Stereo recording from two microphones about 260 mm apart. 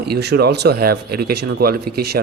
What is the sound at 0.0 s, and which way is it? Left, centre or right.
Speech, right.